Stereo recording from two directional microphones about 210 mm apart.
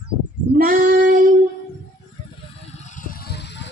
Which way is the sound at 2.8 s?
35° left (ahead or behind).